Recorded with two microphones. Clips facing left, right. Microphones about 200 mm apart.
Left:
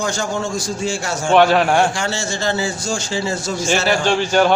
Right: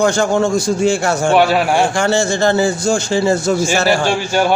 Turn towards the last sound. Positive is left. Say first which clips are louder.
# even
turn(degrees=-10)  # may be behind; listen again after turning